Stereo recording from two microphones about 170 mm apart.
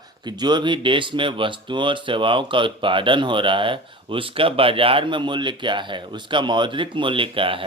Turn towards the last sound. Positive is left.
turn(degrees=-30)  # may be behind; listen again after turning